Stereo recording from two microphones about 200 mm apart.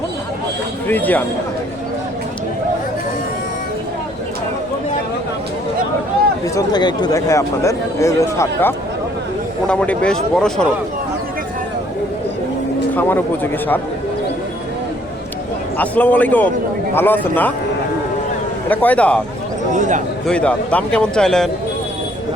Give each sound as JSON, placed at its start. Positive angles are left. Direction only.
{"t": 0.9, "sound": "speech", "side_deg": 10}
{"t": 6.4, "sound": "a man's voice", "side_deg": 20}
{"t": 13.0, "sound": "speech", "side_deg": 10}
{"t": 15.8, "sound": "speech", "side_deg": 10}
{"t": 18.7, "sound": "speech", "side_deg": 10}
{"t": 19.7, "sound": "a man's voice", "side_deg": -35}
{"t": 20.2, "sound": "a man's voice", "side_deg": 5}